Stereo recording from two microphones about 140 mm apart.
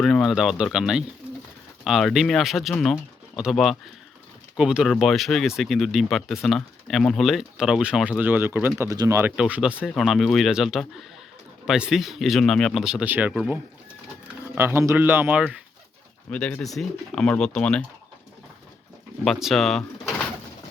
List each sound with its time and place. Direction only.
0.0 s speech: centre (ahead or behind); by 9.3 s 20° right (ahead or behind)
9.3 s speech: 5° right (ahead or behind)
16.3 s speech: 10° left (ahead or behind)
19.2 s speech: centre (ahead or behind)